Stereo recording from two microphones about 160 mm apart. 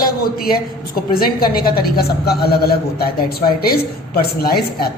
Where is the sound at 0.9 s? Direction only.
70° left (ahead or behind).